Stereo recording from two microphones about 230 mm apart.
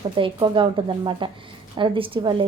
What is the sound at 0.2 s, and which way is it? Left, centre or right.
A woman's voice, right.